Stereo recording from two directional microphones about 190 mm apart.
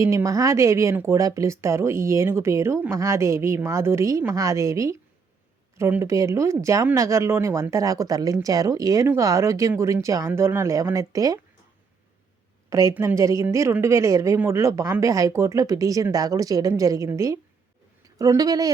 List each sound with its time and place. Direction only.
0.0 s speech: 15° right (ahead or behind)
12.7 s speech: 15° right (ahead or behind)